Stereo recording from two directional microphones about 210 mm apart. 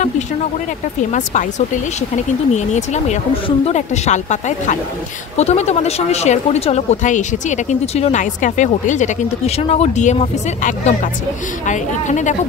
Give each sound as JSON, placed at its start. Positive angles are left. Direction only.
{"t": 1.1, "sound": "speech", "side_deg": 35}